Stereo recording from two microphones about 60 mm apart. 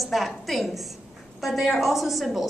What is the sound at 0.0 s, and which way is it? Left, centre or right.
A woman's voice, centre.